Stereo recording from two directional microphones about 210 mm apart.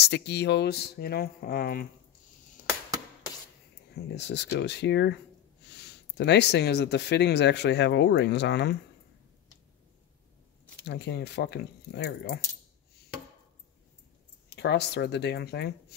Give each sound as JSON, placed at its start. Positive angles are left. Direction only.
{"t": 0.0, "sound": "speech", "side_deg": 55}
{"t": 3.9, "sound": "speech", "side_deg": 55}
{"t": 10.9, "sound": "speech", "side_deg": 55}
{"t": 14.5, "sound": "speech", "side_deg": 55}